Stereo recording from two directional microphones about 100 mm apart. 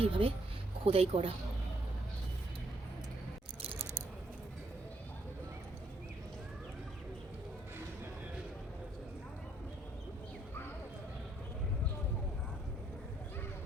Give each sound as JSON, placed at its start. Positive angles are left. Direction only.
{"t": 0.0, "sound": "speech", "side_deg": -65}
{"t": 0.9, "sound": "speech", "side_deg": -75}